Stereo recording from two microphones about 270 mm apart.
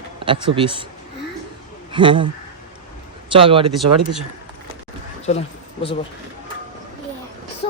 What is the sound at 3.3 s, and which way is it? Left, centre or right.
Speech, centre.